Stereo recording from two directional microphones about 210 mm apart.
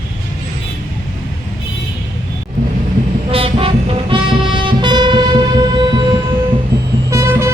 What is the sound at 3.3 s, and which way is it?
Music, 25° right (ahead or behind).